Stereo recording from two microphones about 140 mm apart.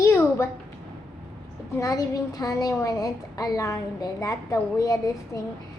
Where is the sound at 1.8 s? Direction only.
25° left (ahead or behind).